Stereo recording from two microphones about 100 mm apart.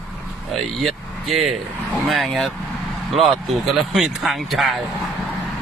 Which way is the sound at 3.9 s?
5° right (ahead or behind).